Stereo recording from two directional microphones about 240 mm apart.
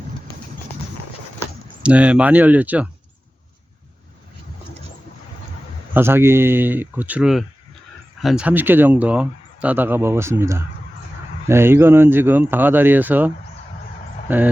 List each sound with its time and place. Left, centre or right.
1.8 s speech: centre
5.9 s speech: centre